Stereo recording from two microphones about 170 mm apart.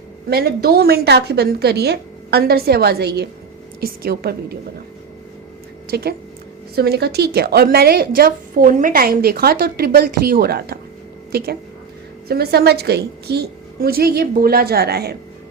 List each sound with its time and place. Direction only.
0.3 s a woman's voice: 65° right (ahead or behind)
5.9 s a woman's voice: 65° right (ahead or behind)